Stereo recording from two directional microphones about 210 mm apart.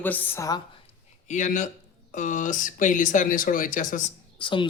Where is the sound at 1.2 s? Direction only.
35° left (ahead or behind).